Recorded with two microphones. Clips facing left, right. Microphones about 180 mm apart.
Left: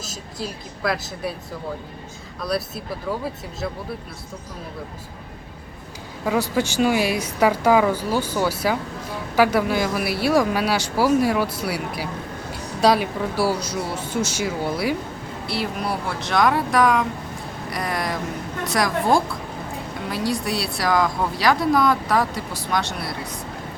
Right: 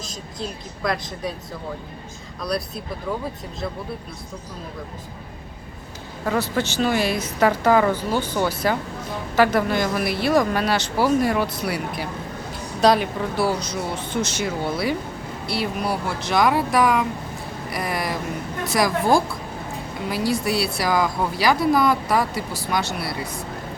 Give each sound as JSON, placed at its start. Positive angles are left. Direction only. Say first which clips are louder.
{"t": 0.0, "sound": "speech", "louder": "even", "side_deg": 5}
{"t": 2.4, "sound": "speech", "louder": "left 1 dB", "side_deg": 5}
{"t": 6.2, "sound": "speech", "louder": "left 1 dB", "side_deg": 10}
{"t": 17.7, "sound": "a sound", "louder": "even", "side_deg": -5}
{"t": 18.6, "sound": "speech", "louder": "right 1 dB", "side_deg": 0}